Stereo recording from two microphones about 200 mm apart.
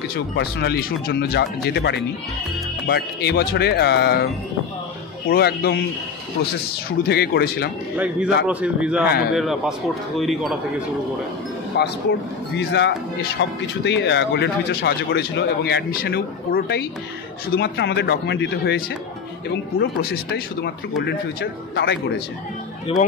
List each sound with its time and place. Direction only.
0.1 s speech: 55° left (ahead or behind)
5.3 s speech: 50° left (ahead or behind)
7.0 s speech: 55° left (ahead or behind)
8.5 s a man's voice: 5° right (ahead or behind)
11.7 s speech: 55° left (ahead or behind)
22.9 s speech: 30° left (ahead or behind)